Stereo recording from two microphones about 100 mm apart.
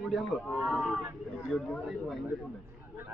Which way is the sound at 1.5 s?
5° left (ahead or behind).